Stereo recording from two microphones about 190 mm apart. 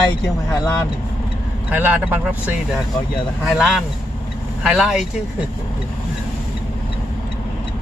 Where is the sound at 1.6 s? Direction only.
10° right (ahead or behind).